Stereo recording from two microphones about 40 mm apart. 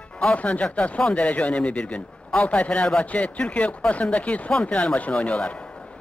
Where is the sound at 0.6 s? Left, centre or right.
Left.